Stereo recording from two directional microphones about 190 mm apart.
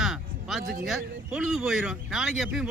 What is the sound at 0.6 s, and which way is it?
Speech, 55° right (ahead or behind).